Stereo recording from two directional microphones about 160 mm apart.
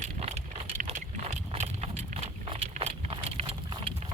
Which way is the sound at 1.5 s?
40° right (ahead or behind).